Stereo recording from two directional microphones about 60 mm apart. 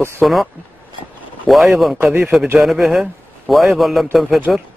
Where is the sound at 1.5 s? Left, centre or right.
Centre.